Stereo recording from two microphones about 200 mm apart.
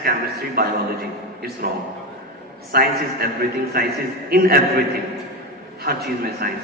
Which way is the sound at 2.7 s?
50° right (ahead or behind).